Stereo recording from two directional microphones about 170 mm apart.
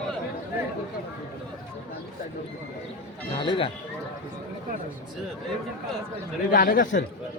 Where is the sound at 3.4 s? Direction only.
30° left (ahead or behind).